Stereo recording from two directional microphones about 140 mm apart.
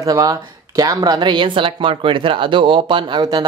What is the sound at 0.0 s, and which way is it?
Speech, 25° right (ahead or behind).